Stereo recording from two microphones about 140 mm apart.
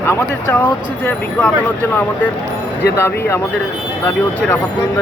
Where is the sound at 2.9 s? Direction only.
20° left (ahead or behind).